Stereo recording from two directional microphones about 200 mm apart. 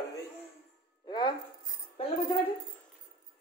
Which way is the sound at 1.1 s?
25° left (ahead or behind).